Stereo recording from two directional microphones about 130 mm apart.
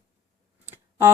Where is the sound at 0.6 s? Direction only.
15° right (ahead or behind).